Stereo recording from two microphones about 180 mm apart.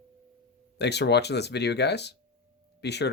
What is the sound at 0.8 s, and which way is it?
Speech, 70° left (ahead or behind).